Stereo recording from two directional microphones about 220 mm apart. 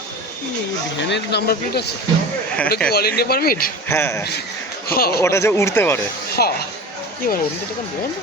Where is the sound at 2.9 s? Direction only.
45° left (ahead or behind).